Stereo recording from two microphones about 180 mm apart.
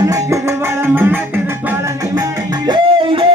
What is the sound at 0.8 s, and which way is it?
Music, 10° right (ahead or behind).